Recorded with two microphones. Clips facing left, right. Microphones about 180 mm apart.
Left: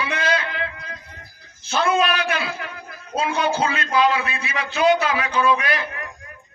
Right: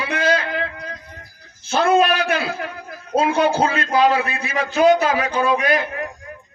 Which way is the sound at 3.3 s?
60° right (ahead or behind).